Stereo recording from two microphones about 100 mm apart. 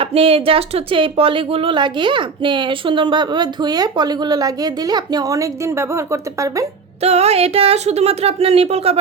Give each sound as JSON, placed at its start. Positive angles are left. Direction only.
{"t": 0.0, "sound": "speech", "side_deg": -70}
{"t": 7.0, "sound": "speech", "side_deg": -90}